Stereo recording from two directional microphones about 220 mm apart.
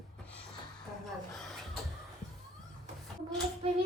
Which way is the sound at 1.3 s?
Centre (ahead or behind).